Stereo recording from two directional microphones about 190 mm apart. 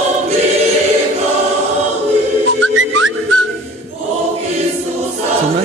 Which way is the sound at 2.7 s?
90° right.